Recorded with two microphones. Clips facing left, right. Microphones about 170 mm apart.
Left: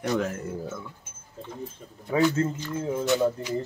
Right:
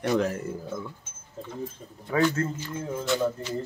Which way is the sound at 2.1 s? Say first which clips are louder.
Left 2 dB; 20° left (ahead or behind).